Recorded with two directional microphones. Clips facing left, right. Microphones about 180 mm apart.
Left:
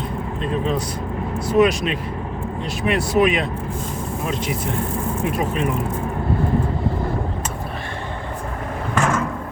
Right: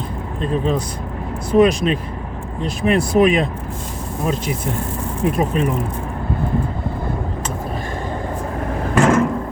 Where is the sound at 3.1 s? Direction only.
40° right (ahead or behind).